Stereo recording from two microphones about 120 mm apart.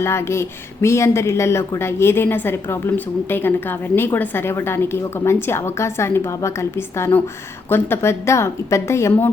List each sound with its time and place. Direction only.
0.0 s speech: 20° left (ahead or behind)